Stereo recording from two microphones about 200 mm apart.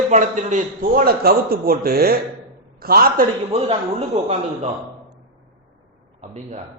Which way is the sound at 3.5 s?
30° right (ahead or behind).